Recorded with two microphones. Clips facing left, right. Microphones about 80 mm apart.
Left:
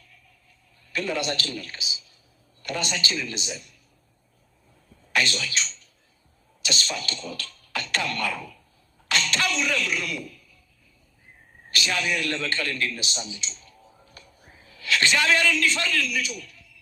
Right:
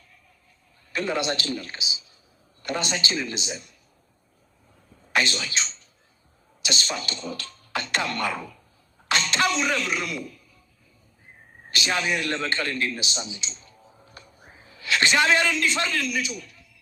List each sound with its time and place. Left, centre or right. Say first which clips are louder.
0.9 s a man's voice: right 1 dB; right
5.1 s a man's voice: right 1 dB; right
11.7 s a man's voice: right 1 dB; right